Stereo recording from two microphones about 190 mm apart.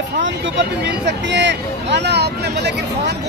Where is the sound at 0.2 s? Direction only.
65° right (ahead or behind).